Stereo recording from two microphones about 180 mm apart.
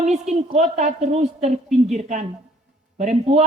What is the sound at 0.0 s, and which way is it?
A woman's voice, 40° right (ahead or behind).